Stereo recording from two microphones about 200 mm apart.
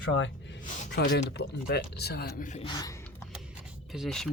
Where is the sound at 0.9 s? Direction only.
55° left (ahead or behind).